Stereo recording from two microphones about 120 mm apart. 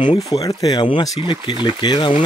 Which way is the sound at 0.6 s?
40° left (ahead or behind).